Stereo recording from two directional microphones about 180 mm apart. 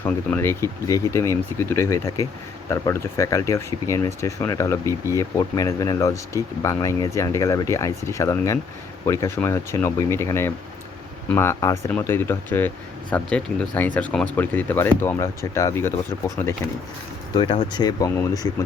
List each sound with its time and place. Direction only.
0.0 s speech: 10° left (ahead or behind)
17.3 s speech: 25° left (ahead or behind)